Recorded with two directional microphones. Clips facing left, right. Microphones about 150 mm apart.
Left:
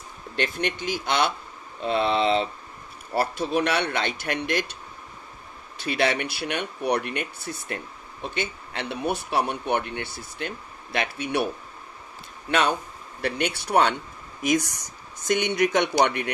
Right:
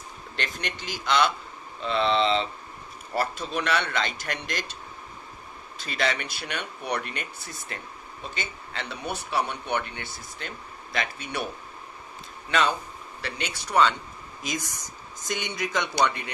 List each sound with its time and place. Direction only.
0.4 s a man's voice: 55° left (ahead or behind)
5.9 s speech: 55° left (ahead or behind)
12.4 s speech: 55° left (ahead or behind)